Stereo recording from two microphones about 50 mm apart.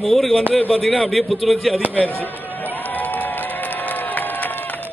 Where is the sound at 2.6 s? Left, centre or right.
Left.